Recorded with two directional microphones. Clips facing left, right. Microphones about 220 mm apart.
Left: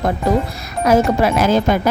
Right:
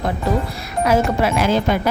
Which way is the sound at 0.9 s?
45° left (ahead or behind).